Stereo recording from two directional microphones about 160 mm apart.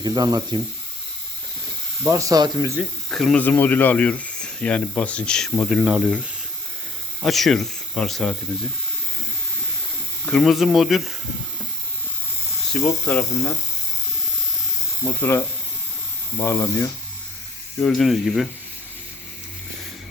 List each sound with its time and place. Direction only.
0.0 s speech: 25° right (ahead or behind)
2.0 s speech: 20° right (ahead or behind)
3.1 s speech: centre (ahead or behind)
7.2 s speech: centre (ahead or behind)
10.2 s speech: 5° left (ahead or behind)
12.7 s speech: 5° left (ahead or behind)
13.1 s speech: 20° left (ahead or behind)
15.0 s speech: 15° left (ahead or behind)
17.7 s speech: 5° left (ahead or behind)